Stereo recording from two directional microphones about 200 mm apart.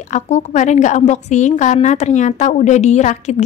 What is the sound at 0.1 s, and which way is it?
A woman's voice, 35° left (ahead or behind).